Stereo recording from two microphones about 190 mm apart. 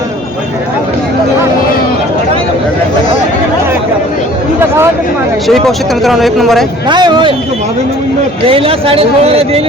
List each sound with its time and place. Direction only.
5.5 s speech: centre (ahead or behind)
6.8 s speech: 25° right (ahead or behind)
8.4 s a man's voice: 30° right (ahead or behind)